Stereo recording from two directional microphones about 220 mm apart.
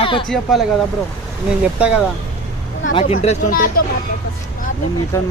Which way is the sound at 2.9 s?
25° left (ahead or behind).